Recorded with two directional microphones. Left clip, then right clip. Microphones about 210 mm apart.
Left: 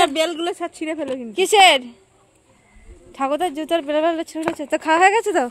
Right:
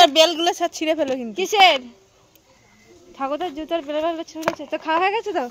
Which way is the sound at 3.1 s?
45° left (ahead or behind).